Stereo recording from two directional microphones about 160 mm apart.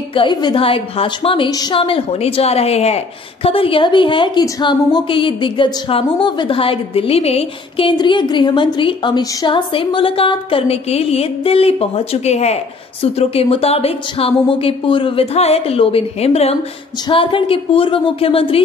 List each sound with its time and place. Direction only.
0.1 s a woman's voice: 30° left (ahead or behind)